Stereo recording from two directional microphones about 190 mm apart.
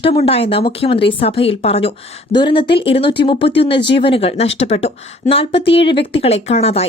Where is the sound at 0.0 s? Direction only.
30° left (ahead or behind).